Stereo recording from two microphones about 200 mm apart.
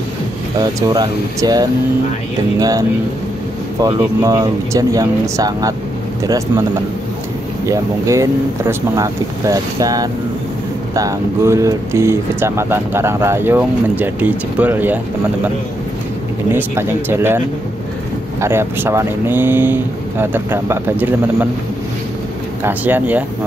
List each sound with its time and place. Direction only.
0.6 s speech: 20° right (ahead or behind)
3.8 s speech: 15° right (ahead or behind)
7.6 s speech: 15° right (ahead or behind)
16.5 s speech: 10° right (ahead or behind)
18.4 s speech: 10° right (ahead or behind)
22.6 s speech: 10° right (ahead or behind)